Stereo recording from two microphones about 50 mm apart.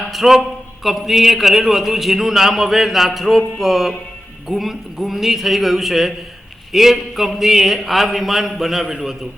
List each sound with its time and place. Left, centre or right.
0.1 s a man's voice: centre